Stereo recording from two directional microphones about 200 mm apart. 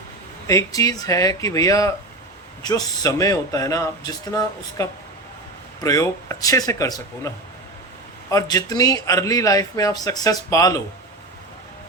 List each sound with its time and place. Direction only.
0.4 s a man's voice: 15° left (ahead or behind)